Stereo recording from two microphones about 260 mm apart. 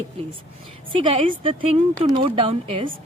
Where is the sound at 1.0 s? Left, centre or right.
Centre.